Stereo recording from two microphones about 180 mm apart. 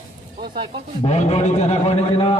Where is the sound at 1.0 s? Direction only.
35° left (ahead or behind).